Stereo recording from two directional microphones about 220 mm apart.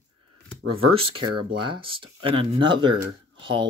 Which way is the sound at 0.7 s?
25° right (ahead or behind).